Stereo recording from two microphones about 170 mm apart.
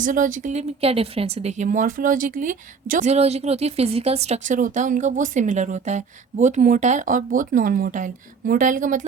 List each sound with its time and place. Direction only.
0.0 s speech: 50° right (ahead or behind)
0.8 s speech: 35° right (ahead or behind)